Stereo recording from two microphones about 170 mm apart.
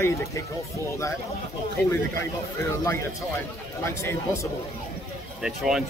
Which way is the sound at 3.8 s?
15° left (ahead or behind).